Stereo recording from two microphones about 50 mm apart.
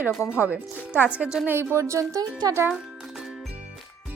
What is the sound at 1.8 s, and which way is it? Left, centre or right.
Speech, right.